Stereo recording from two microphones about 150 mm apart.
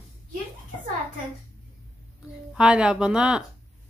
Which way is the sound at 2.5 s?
5° right (ahead or behind).